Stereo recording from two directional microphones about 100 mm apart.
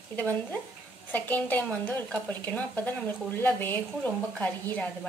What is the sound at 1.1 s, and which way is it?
A woman's voice, 15° left (ahead or behind).